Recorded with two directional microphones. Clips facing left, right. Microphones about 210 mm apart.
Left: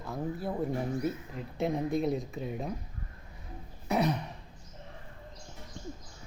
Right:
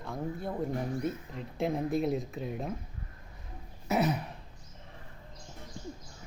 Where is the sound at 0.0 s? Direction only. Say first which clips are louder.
Left 1 dB; 5° left (ahead or behind).